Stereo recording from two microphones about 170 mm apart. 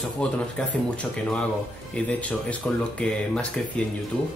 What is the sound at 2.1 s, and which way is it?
Speech, 10° left (ahead or behind).